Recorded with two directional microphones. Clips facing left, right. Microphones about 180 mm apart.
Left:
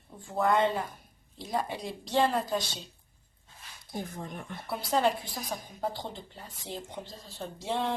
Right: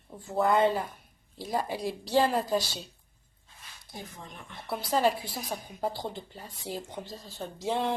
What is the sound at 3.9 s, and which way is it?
Speech, 50° left (ahead or behind).